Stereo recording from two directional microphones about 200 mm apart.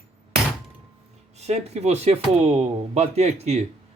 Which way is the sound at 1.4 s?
35° right (ahead or behind).